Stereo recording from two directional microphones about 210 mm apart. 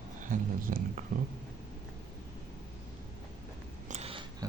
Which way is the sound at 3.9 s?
30° right (ahead or behind).